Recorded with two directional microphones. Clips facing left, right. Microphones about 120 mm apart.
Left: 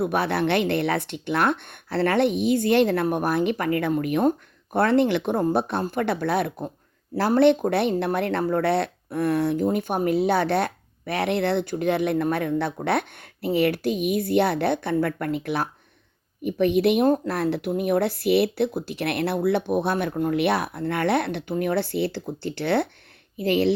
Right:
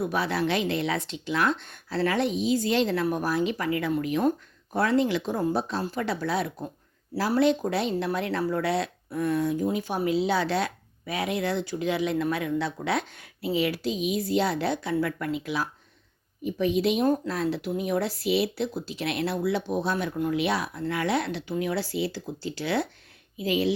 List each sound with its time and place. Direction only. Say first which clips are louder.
0.0 s speech: left 4 dB; 60° left (ahead or behind)
9.6 s speech: left 4 dB; 55° left (ahead or behind)